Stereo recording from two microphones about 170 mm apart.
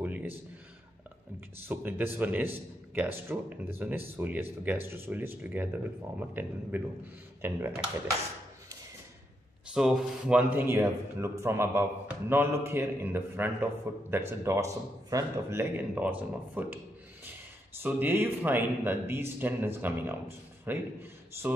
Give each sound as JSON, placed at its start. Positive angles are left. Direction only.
{"t": 0.0, "sound": "a sound", "side_deg": -10}
{"t": 1.7, "sound": "a man's voice", "side_deg": -10}
{"t": 9.8, "sound": "a man's voice", "side_deg": -5}